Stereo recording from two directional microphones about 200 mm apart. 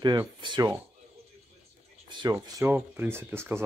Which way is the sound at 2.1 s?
20° right (ahead or behind).